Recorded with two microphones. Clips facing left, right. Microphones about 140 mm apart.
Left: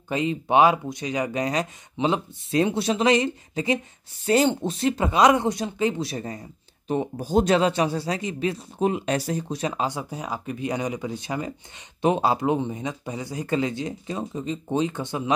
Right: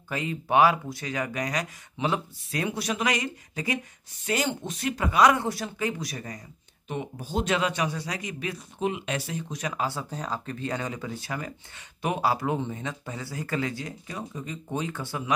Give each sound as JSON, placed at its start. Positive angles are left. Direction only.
{"t": 0.1, "sound": "speech", "side_deg": 20}